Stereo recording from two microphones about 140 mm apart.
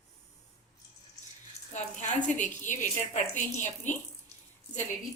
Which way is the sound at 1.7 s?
60° left (ahead or behind).